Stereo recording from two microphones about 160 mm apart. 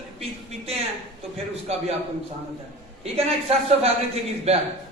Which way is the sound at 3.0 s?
40° right (ahead or behind).